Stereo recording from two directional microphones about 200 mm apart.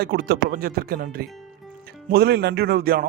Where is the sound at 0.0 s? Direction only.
55° right (ahead or behind).